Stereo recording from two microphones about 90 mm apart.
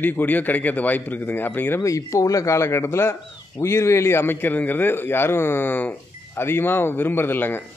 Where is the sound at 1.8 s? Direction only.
35° left (ahead or behind).